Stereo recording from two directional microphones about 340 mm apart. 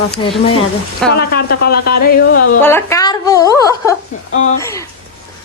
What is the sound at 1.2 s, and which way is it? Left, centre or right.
Speech, left.